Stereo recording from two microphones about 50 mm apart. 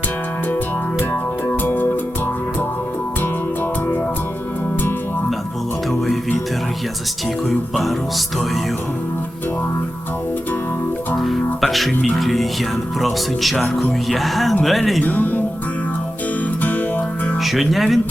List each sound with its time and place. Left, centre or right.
1.5 s music: left
7.5 s speech: centre
11.2 s speech: centre
15.0 s music: left
17.4 s speech: centre